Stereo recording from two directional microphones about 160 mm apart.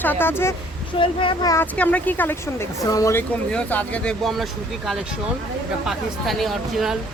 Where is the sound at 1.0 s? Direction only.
30° left (ahead or behind).